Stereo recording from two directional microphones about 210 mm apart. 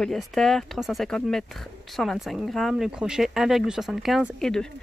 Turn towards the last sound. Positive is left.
turn(degrees=0)  # may be behind; listen again after turning